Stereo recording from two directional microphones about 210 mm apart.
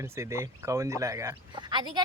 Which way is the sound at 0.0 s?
15° right (ahead or behind).